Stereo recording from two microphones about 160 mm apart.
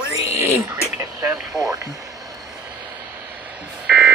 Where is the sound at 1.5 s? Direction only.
20° right (ahead or behind).